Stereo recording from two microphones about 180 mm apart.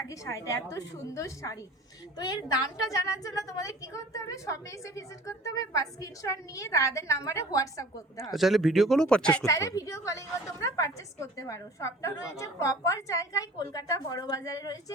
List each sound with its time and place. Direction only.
0.1 s a woman's voice: 15° left (ahead or behind)
2.9 s a woman's voice: 20° left (ahead or behind)
8.2 s speech: centre (ahead or behind)
9.5 s a woman's voice: 15° left (ahead or behind)